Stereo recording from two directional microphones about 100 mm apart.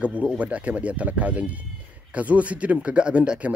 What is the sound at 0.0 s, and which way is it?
A man's voice, 10° right (ahead or behind).